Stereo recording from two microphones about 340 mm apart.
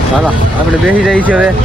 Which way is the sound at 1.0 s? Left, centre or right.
Centre.